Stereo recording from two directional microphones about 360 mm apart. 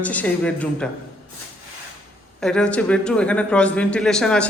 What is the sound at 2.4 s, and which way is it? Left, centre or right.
Speech, centre.